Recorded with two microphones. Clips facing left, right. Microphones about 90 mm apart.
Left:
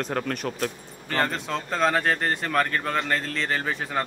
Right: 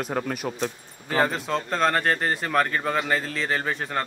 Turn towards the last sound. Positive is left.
turn(degrees=0)  # may be behind; listen again after turning